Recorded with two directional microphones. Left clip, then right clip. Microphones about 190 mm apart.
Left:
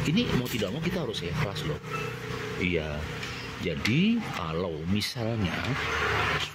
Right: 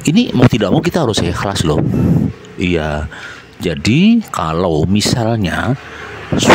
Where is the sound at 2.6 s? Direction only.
55° right (ahead or behind).